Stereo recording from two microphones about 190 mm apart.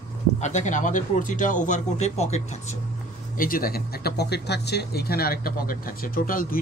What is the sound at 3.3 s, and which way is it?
Speech, 50° left (ahead or behind).